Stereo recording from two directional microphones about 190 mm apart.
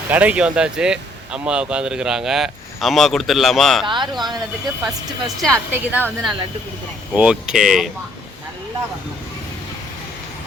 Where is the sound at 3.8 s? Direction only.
25° right (ahead or behind).